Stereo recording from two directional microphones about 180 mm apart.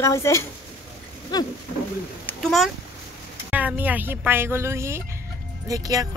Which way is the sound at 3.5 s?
10° right (ahead or behind).